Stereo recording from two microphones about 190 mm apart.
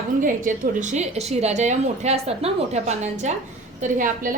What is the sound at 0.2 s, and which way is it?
A woman's voice, 45° right (ahead or behind).